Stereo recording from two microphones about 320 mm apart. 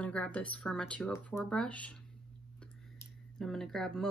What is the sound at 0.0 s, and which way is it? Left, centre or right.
Speech, centre.